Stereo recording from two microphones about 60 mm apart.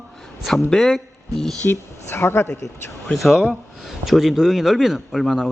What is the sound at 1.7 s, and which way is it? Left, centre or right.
Speech, left.